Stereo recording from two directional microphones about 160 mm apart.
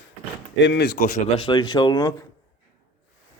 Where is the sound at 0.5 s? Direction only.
90° left.